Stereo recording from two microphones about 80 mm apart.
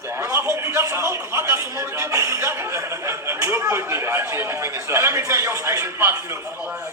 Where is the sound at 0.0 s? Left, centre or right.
Right.